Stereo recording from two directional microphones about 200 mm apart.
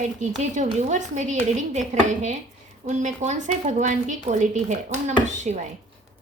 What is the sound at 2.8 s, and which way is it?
Speech, 35° right (ahead or behind).